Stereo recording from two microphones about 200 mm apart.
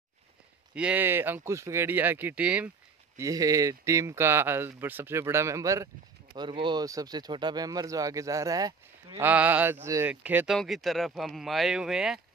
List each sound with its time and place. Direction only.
0.7 s speech: 5° right (ahead or behind)
9.3 s speech: 10° right (ahead or behind)